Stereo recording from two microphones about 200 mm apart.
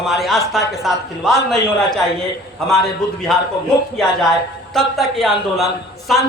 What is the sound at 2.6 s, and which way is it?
Speech, centre (ahead or behind).